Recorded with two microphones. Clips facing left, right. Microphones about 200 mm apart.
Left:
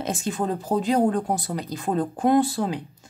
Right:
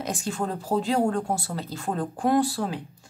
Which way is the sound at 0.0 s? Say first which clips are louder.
Left 3 dB; 25° left (ahead or behind).